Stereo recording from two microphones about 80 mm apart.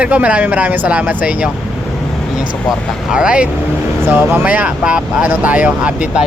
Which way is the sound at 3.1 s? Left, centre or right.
Centre.